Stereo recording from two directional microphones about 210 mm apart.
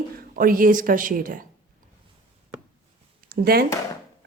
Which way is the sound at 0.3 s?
40° right (ahead or behind).